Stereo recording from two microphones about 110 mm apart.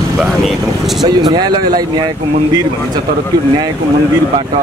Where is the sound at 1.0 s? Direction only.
40° right (ahead or behind).